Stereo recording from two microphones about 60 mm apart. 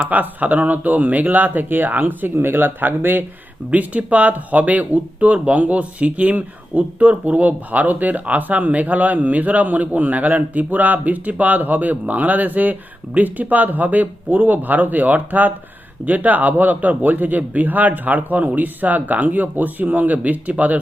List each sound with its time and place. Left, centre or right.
0.0 s speech: right
3.7 s speech: right